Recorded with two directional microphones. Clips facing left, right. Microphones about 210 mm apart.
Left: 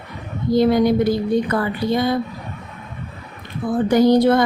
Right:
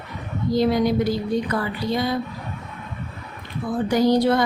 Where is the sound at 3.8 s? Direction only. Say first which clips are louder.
Left 4 dB; 55° left (ahead or behind).